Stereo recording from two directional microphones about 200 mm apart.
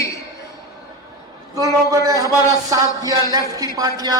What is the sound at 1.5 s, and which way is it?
A man's voice, 15° right (ahead or behind).